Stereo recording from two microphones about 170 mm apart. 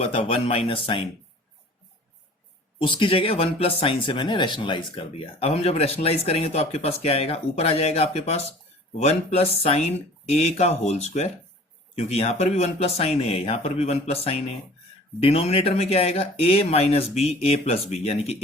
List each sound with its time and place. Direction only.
0.0 s speech: 35° left (ahead or behind)
2.7 s speech: 30° left (ahead or behind)